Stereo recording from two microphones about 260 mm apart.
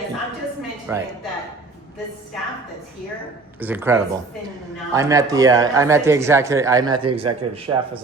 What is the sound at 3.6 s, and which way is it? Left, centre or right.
A man's voice, centre.